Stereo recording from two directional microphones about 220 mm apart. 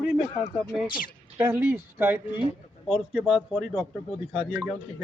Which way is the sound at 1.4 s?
10° right (ahead or behind).